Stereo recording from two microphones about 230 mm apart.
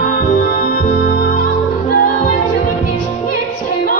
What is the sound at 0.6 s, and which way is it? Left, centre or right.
Music, left.